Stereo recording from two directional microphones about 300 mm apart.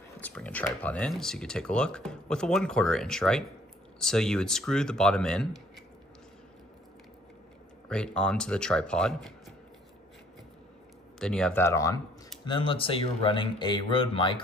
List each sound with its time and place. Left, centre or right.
0.2 s speech: centre
7.9 s speech: centre
11.1 s speech: centre